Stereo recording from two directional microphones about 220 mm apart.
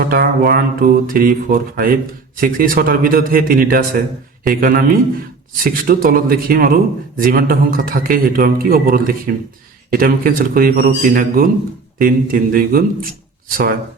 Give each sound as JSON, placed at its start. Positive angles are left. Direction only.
{"t": 0.1, "sound": "a man's voice", "side_deg": -45}